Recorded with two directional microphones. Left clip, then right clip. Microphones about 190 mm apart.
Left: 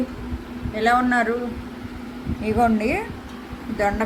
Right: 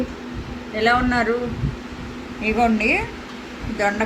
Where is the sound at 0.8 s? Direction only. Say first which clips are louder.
Even; centre (ahead or behind).